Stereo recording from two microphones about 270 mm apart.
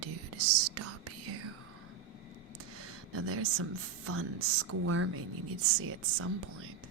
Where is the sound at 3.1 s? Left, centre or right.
Right.